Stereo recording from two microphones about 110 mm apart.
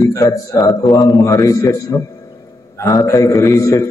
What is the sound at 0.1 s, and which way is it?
A man's voice, 30° left (ahead or behind).